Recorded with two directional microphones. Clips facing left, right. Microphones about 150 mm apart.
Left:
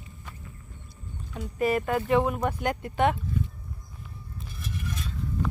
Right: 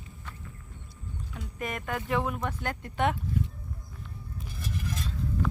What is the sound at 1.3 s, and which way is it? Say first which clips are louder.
Speech: left 11 dB; 5° left (ahead or behind).